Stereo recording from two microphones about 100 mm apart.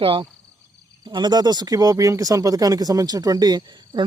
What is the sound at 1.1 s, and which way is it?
Speech, 45° right (ahead or behind).